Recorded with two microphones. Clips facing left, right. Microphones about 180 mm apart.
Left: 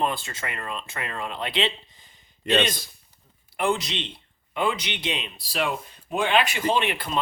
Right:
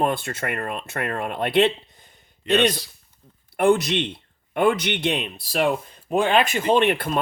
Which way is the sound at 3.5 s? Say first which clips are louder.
Right 7 dB; 50° right (ahead or behind).